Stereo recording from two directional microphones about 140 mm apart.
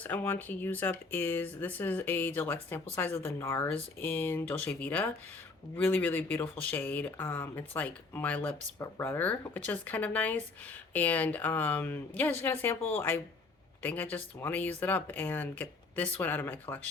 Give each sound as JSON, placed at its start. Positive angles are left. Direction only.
{"t": 0.0, "sound": "speech", "side_deg": 15}